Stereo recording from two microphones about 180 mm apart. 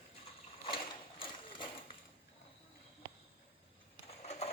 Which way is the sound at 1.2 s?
30° left (ahead or behind).